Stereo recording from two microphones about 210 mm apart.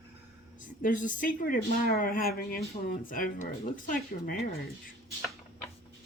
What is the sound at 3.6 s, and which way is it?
Speech, 40° left (ahead or behind).